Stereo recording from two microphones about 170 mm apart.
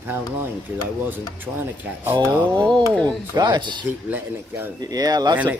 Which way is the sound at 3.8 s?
10° right (ahead or behind).